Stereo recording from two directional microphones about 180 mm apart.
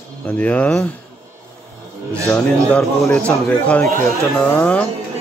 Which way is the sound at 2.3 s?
Centre (ahead or behind).